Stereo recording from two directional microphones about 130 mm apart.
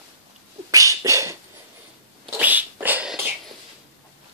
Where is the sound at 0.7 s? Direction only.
25° right (ahead or behind).